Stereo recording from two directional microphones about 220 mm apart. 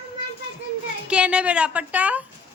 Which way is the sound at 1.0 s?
5° right (ahead or behind).